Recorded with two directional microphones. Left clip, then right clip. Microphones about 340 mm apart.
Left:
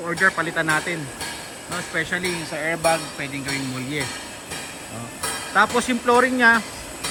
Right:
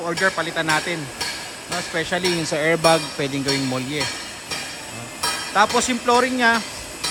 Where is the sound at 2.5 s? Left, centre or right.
Centre.